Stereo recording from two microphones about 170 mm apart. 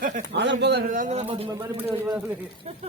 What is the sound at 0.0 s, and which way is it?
Speech, 45° right (ahead or behind).